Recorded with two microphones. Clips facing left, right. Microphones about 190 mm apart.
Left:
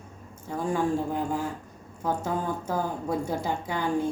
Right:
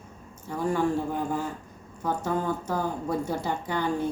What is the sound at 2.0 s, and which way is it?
A woman's voice, 10° left (ahead or behind).